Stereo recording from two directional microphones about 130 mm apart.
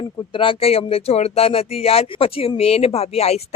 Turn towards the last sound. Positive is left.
turn(degrees=55)  # may be behind; listen again after turning